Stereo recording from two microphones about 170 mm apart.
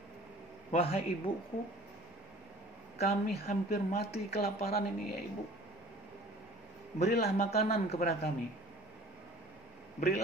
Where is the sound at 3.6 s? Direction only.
65° left (ahead or behind).